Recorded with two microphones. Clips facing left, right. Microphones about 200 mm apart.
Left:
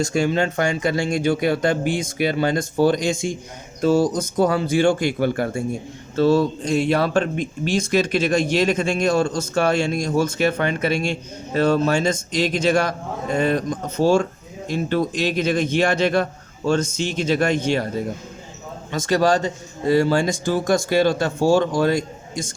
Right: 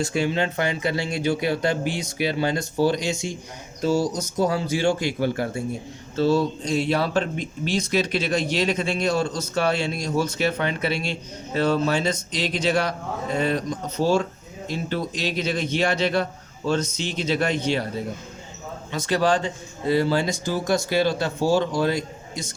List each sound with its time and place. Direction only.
0.0 s speech: 45° left (ahead or behind)
18.9 s speech: 45° left (ahead or behind)